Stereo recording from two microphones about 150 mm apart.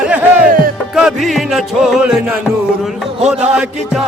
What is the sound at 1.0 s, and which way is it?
Speech, centre (ahead or behind).